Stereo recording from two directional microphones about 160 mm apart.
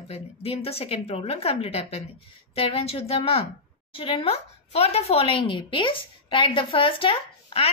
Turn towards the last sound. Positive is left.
turn(degrees=35)  # may be behind; listen again after turning